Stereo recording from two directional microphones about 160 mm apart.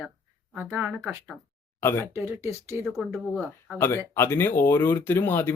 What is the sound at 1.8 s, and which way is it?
Speech, 15° left (ahead or behind).